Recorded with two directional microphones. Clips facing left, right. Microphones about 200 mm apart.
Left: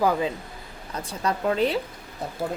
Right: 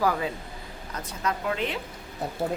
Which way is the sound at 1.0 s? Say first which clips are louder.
Left 4 dB; 30° left (ahead or behind).